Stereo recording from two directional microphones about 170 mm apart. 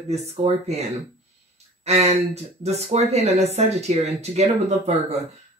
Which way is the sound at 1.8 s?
40° right (ahead or behind).